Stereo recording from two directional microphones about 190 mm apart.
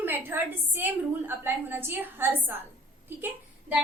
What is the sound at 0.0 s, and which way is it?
A woman's voice, 10° right (ahead or behind).